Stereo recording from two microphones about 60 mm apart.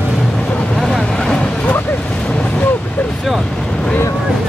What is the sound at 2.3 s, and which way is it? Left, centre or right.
Boat, centre.